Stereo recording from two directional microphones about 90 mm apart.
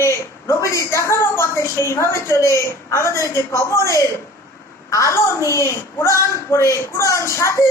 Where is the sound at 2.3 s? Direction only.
35° left (ahead or behind).